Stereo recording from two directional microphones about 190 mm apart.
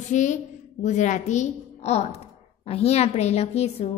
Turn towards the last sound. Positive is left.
turn(degrees=35)  # may be behind; listen again after turning